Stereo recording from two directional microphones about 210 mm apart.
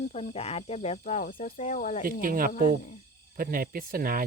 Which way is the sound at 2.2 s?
40° right (ahead or behind).